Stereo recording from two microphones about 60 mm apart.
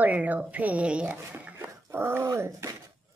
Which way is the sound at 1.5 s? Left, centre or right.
Right.